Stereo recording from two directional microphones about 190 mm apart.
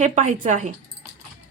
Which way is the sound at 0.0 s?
40° right (ahead or behind).